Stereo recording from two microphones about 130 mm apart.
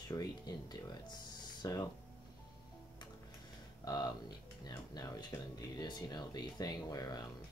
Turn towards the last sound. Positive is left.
turn(degrees=30)  # may be behind; listen again after turning